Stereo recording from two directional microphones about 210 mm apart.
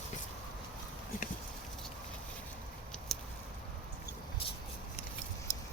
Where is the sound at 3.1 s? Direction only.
Centre (ahead or behind).